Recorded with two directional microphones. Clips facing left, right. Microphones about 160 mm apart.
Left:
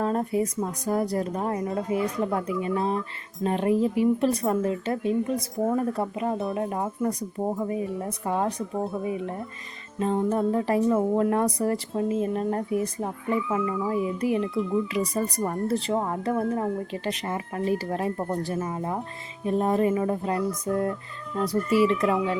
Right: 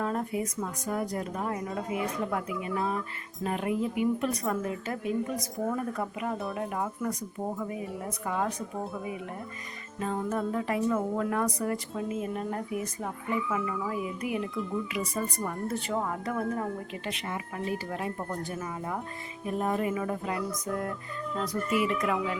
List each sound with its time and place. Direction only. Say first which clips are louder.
0.0 s a woman's voice: left 6 dB; 35° left (ahead or behind)
21.4 s a woman's voice: left 7 dB; 30° left (ahead or behind)